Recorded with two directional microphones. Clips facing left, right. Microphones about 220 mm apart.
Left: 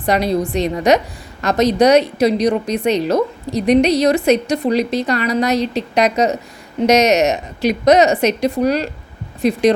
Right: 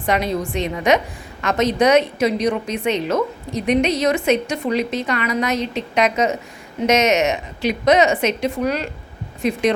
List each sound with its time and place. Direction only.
0.0 s a woman's voice: 35° left (ahead or behind)